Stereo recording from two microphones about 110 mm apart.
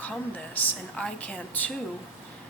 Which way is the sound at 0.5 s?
10° left (ahead or behind).